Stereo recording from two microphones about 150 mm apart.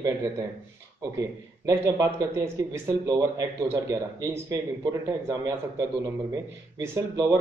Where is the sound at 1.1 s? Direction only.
25° right (ahead or behind).